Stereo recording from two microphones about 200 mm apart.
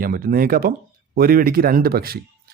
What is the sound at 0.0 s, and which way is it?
Speech, 45° right (ahead or behind).